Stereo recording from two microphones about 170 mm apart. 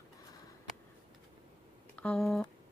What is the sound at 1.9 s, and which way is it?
Speech, 5° left (ahead or behind).